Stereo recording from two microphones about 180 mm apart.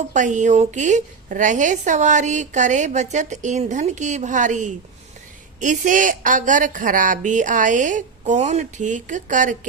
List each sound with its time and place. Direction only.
0.1 s a woman's voice: 45° right (ahead or behind)